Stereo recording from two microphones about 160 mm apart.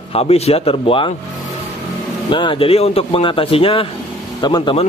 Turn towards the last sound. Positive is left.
turn(degrees=30)  # may be behind; listen again after turning